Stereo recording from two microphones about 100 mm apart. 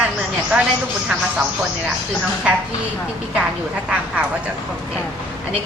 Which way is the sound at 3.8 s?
10° right (ahead or behind).